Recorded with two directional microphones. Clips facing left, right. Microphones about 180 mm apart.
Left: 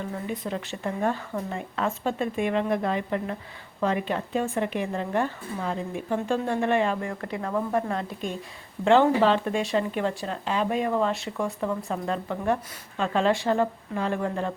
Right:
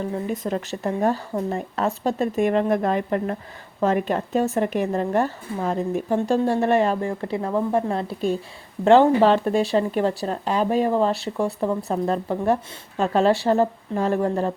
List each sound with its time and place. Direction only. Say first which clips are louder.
0.3 s speech: right 5 dB; 45° right (ahead or behind)